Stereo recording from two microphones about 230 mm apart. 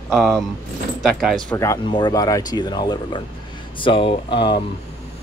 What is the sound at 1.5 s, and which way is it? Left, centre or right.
Speech, centre.